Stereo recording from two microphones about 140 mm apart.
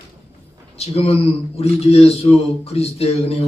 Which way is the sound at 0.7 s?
45° left (ahead or behind).